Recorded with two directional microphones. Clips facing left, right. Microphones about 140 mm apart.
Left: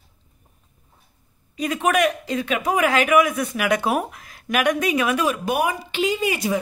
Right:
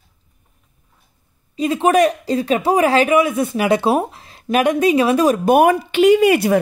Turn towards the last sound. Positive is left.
turn(degrees=-60)  # may be behind; listen again after turning